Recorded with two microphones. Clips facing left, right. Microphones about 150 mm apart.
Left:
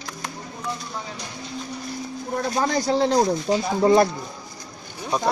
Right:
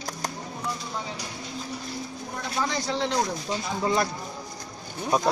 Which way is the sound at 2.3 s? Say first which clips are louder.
Left 7 dB; 45° left (ahead or behind).